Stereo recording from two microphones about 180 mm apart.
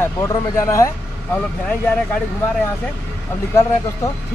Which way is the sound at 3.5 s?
15° left (ahead or behind).